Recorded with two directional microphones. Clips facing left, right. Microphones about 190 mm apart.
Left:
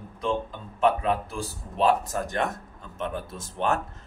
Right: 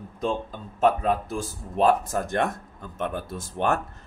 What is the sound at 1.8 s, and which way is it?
Speech, 50° right (ahead or behind).